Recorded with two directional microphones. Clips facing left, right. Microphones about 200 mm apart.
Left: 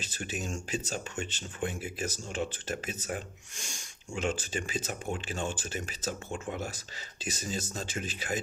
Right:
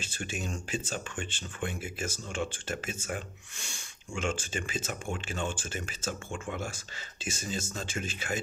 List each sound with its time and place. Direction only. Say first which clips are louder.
0.0 s speech: even; 40° left (ahead or behind)